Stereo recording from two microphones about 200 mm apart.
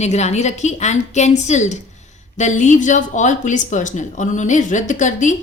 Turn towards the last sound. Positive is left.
turn(degrees=40)  # may be behind; listen again after turning